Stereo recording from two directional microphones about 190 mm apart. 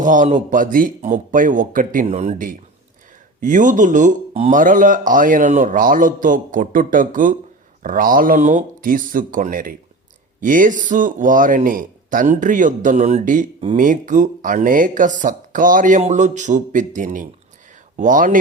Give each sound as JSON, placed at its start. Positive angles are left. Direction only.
{"t": 0.0, "sound": "speech", "side_deg": -40}